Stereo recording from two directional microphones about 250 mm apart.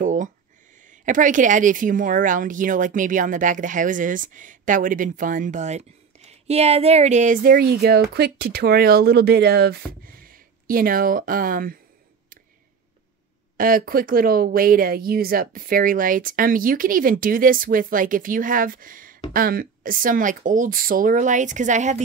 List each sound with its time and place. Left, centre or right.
0.0 s a sound: right
0.8 s speech: right
13.6 s speech: right